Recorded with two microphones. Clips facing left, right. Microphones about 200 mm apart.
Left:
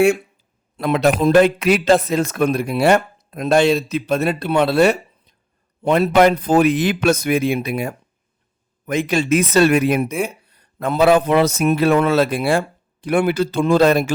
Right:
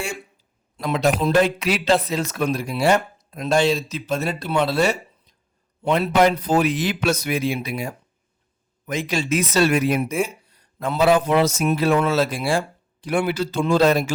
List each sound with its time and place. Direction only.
0.8 s speech: 60° left (ahead or behind)
5.8 s speech: 50° left (ahead or behind)